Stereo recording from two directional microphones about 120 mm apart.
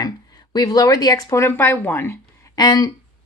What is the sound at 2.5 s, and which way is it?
Speech, 35° left (ahead or behind).